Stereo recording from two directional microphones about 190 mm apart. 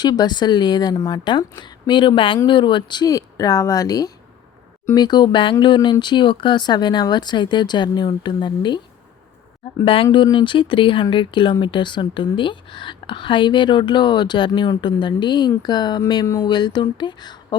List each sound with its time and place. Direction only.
0.0 s speech: 20° left (ahead or behind)
9.8 s speech: 30° left (ahead or behind)